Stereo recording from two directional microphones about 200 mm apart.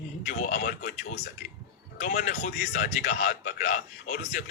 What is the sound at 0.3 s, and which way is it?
A man's voice, 50° left (ahead or behind).